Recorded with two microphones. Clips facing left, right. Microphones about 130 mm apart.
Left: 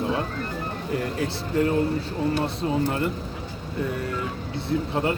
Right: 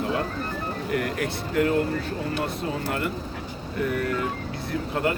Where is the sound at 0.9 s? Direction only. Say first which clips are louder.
Even; 25° left (ahead or behind).